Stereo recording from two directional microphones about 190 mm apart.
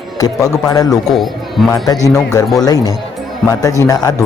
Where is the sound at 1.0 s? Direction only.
Centre (ahead or behind).